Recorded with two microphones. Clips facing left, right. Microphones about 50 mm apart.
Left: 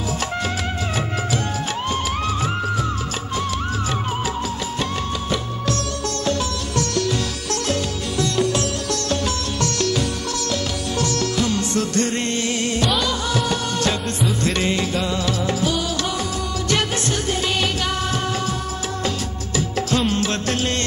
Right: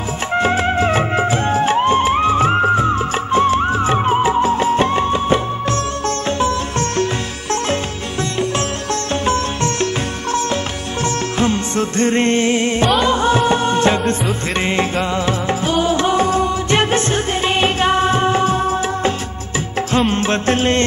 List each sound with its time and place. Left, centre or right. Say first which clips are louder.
0.4 s music: right 9 dB; right
8.2 s music: right 1 dB; right
11.3 s music: right 4 dB; right
20.1 s music: right 5 dB; right